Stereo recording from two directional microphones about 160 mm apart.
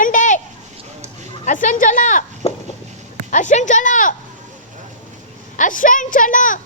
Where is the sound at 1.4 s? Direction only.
55° left (ahead or behind).